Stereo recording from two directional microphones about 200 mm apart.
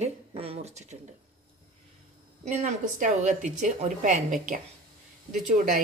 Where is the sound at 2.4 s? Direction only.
35° right (ahead or behind).